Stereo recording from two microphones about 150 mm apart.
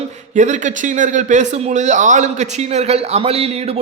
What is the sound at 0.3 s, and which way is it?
A man's voice, 55° right (ahead or behind).